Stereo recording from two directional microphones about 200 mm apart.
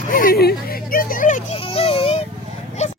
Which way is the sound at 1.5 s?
25° left (ahead or behind).